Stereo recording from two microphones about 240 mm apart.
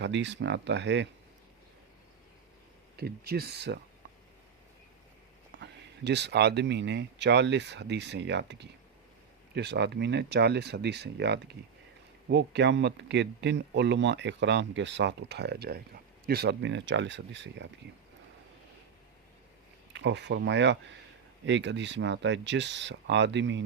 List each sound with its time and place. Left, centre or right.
0.0 s speech: right
2.9 s speech: right
5.5 s speech: right
19.9 s speech: right